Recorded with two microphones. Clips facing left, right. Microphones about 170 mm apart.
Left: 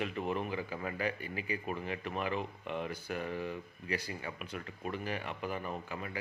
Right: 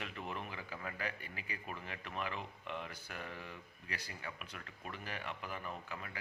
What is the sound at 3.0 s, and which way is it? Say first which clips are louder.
Speech: left 10 dB; 15° left (ahead or behind).